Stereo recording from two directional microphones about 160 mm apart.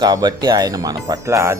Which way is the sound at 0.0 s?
25° right (ahead or behind).